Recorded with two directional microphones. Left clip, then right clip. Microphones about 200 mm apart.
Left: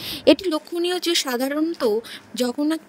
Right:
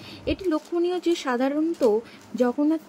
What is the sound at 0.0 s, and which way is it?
A woman's voice, 55° left (ahead or behind).